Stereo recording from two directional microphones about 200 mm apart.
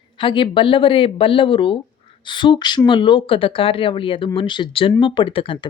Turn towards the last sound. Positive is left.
turn(degrees=25)  # may be behind; listen again after turning